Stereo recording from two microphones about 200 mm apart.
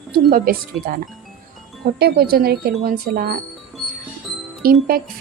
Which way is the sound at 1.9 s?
50° right (ahead or behind).